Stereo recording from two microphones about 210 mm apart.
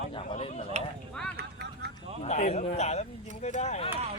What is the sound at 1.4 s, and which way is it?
Vehicle, 50° right (ahead or behind).